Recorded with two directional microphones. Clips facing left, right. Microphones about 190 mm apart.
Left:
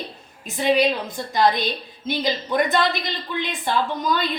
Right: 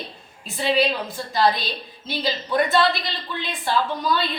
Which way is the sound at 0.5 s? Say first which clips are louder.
Left 2 dB; 15° left (ahead or behind).